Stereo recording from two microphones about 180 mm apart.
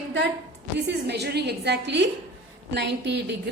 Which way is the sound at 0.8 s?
70° right (ahead or behind).